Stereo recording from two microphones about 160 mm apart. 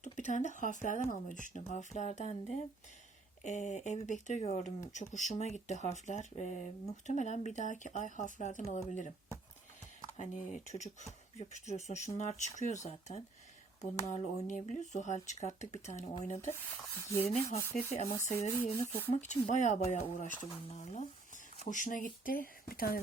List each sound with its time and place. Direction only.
0.0 s speech: 50° left (ahead or behind)
10.2 s speech: 50° left (ahead or behind)
17.4 s speech: 20° left (ahead or behind)
17.9 s speech: 40° left (ahead or behind); by 23.0 s 65° left (ahead or behind)